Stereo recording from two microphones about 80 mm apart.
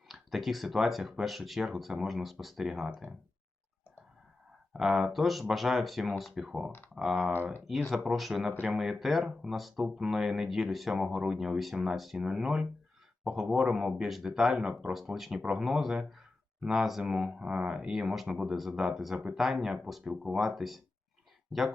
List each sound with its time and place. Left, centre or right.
0.1 s speech: centre
4.7 s speech: centre
6.7 s speech: left
6.9 s speech: centre